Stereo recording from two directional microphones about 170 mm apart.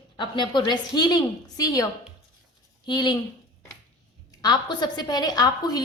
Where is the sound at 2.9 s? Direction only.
25° left (ahead or behind).